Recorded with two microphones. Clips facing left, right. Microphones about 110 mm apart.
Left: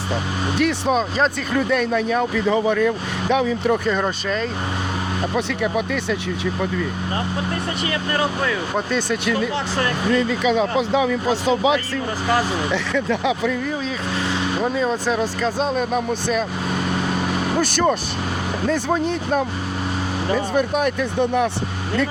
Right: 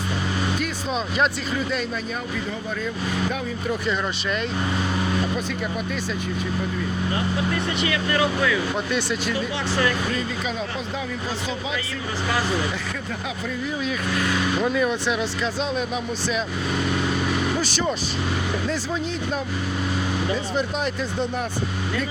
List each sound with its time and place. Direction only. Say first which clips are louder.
1.5 s speech: left 6 dB; 55° left (ahead or behind)
1.9 s speech: left 9 dB; 80° left
3.8 s speech: left 4 dB; 45° left (ahead or behind)
5.7 s speech: left 6 dB; 65° left (ahead or behind)
7.5 s speech: even; 35° left (ahead or behind)
10.4 s speech: left 10 dB; 90° left
14.2 s speech: left 1 dB; 30° left (ahead or behind)
15.0 s speech: left 4 dB; 45° left (ahead or behind)
17.6 s speech: left 6 dB; 55° left (ahead or behind)